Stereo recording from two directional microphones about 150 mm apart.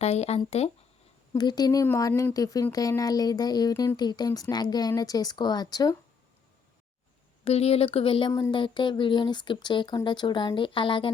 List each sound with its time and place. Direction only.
0.0 s speech: 45° left (ahead or behind)
1.3 s speech: 25° left (ahead or behind)
7.4 s a woman's voice: 45° left (ahead or behind)